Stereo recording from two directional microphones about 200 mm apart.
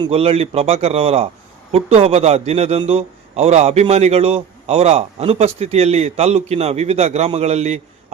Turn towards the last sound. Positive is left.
turn(degrees=-30)  # may be behind; listen again after turning